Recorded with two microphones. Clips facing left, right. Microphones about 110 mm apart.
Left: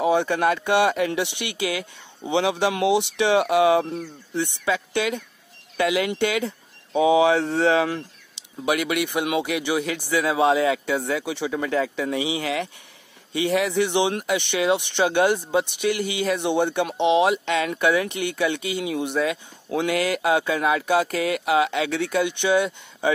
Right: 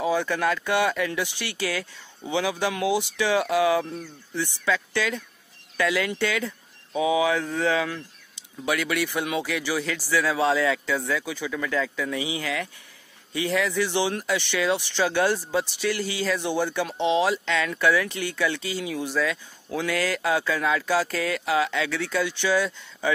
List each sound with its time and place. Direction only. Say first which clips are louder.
0.0 s speech: left 4 dB; 25° left (ahead or behind)